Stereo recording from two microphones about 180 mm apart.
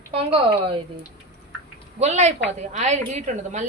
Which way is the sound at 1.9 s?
40° right (ahead or behind).